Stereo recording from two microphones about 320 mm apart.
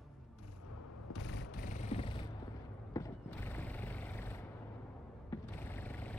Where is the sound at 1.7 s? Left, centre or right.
Centre.